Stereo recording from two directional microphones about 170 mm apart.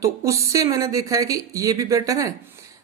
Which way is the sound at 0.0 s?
20° right (ahead or behind).